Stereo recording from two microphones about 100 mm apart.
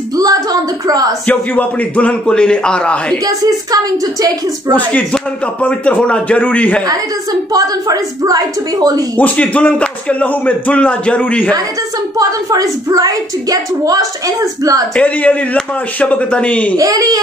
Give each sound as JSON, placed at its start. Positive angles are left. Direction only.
{"t": 0.1, "sound": "a sound", "side_deg": -40}
{"t": 1.2, "sound": "speech", "side_deg": 15}
{"t": 3.3, "sound": "speech", "side_deg": -40}
{"t": 4.7, "sound": "speech", "side_deg": 15}
{"t": 7.5, "sound": "speech", "side_deg": -40}
{"t": 9.1, "sound": "speech", "side_deg": 15}
{"t": 12.2, "sound": "speech", "side_deg": -35}
{"t": 15.0, "sound": "speech", "side_deg": 15}
{"t": 16.7, "sound": "speech", "side_deg": -40}